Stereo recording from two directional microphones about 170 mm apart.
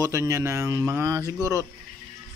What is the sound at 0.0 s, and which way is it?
A man's voice, 20° right (ahead or behind).